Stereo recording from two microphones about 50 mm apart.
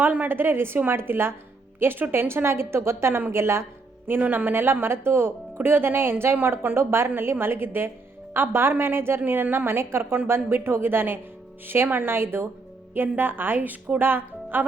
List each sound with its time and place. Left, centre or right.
0.0 s a woman's voice: right
4.0 s a woman's voice: right
9.7 s a woman's voice: right